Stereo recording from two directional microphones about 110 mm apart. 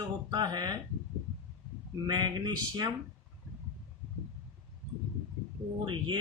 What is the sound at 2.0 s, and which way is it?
Speech, 40° right (ahead or behind).